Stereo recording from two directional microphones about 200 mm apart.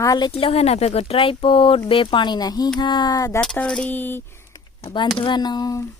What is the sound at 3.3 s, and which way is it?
Speech, 5° left (ahead or behind).